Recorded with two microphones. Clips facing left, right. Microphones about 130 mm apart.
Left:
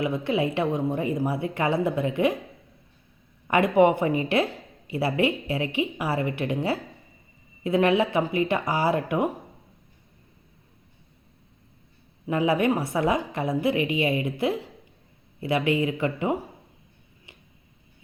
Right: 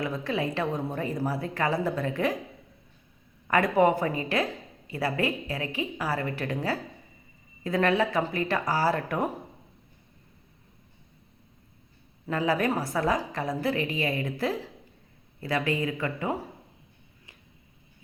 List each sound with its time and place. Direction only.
0.0 s speech: 25° left (ahead or behind)
3.5 s speech: 20° left (ahead or behind)
12.3 s speech: 20° left (ahead or behind)